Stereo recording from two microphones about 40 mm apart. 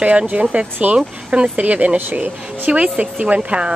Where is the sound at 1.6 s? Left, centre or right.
Right.